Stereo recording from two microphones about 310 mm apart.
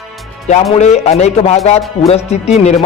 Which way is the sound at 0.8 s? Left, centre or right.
Left.